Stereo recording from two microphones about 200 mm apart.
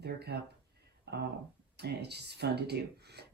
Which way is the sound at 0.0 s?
55° right (ahead or behind).